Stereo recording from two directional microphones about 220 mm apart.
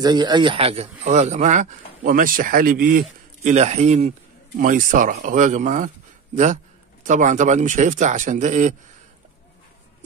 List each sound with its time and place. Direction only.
0.0 s speech: 20° right (ahead or behind); by 8.7 s 35° right (ahead or behind)